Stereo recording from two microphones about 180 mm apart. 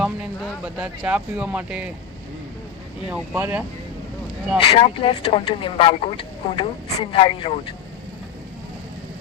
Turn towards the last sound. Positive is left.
turn(degrees=30)  # may be behind; listen again after turning